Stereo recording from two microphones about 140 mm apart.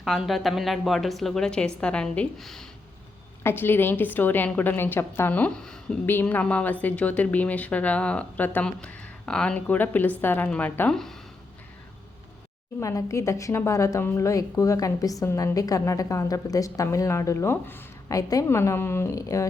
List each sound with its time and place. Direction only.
0.0 s a woman's voice: centre (ahead or behind)
3.4 s speech: 15° left (ahead or behind)
12.8 s a woman's voice: 25° left (ahead or behind)